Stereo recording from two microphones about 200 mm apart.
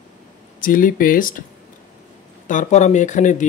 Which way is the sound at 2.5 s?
35° left (ahead or behind).